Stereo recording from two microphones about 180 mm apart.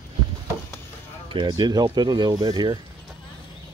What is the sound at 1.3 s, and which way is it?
Speech, 25° right (ahead or behind).